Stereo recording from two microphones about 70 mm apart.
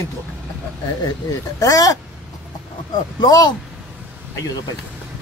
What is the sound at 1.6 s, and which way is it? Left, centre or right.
Speech, left.